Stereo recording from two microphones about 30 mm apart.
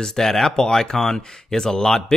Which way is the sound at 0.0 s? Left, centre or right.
Centre.